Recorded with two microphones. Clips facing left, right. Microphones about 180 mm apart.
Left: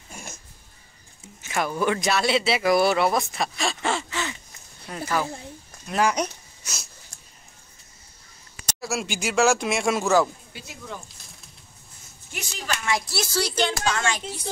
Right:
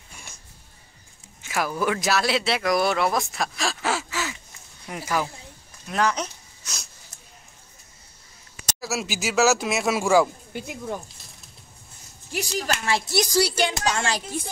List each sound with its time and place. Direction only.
1.5 s speech: centre (ahead or behind)
5.9 s a sound: 10° left (ahead or behind)
7.1 s a sound: 5° right (ahead or behind)
8.8 s speech: 5° right (ahead or behind)
10.5 s speech: 50° right (ahead or behind)
12.3 s speech: 35° right (ahead or behind)
13.1 s speech: 15° right (ahead or behind)